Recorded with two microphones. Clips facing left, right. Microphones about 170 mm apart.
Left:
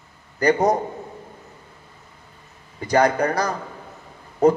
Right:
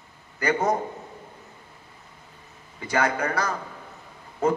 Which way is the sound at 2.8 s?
40° left (ahead or behind).